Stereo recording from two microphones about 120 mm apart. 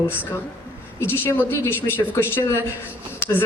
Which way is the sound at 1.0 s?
15° left (ahead or behind).